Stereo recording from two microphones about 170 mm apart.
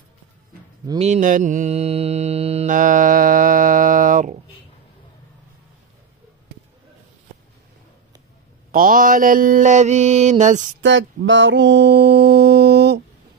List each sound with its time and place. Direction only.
0.9 s mantra: 40° right (ahead or behind)
2.7 s mantra: 50° right (ahead or behind)
8.7 s mantra: 55° right (ahead or behind)
10.8 s mantra: 90° right